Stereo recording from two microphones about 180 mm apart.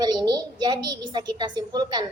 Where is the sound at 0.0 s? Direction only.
25° right (ahead or behind).